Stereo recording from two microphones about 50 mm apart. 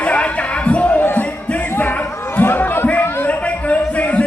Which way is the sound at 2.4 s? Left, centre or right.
Left.